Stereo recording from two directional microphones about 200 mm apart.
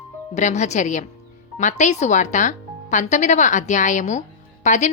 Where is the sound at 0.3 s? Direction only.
35° left (ahead or behind).